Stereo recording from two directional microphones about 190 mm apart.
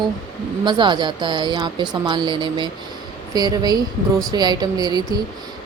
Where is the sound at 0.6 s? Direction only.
25° right (ahead or behind).